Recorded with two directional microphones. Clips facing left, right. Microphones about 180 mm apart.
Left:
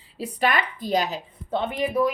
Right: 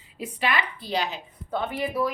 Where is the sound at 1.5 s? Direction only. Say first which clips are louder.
Left 3 dB; 20° left (ahead or behind).